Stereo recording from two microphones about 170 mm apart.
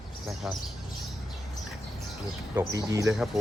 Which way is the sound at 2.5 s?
15° right (ahead or behind).